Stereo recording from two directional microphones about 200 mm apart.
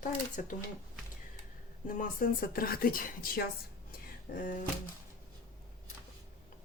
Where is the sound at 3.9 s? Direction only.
40° left (ahead or behind).